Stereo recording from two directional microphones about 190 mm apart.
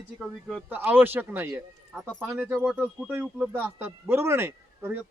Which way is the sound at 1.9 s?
Centre (ahead or behind).